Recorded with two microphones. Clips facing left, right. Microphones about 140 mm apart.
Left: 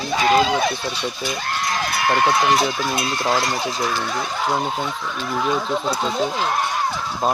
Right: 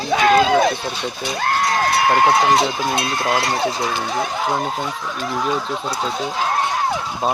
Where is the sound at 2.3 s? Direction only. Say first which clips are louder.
Right 2 dB; 30° right (ahead or behind).